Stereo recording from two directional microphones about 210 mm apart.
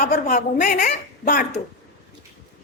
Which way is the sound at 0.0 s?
45° left (ahead or behind).